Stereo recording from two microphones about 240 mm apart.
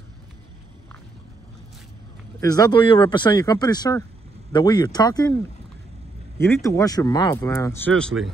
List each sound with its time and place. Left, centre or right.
2.4 s speech: centre
6.3 s speech: centre
7.9 s speech: centre